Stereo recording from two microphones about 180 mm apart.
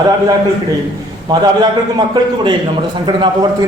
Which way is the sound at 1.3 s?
25° right (ahead or behind).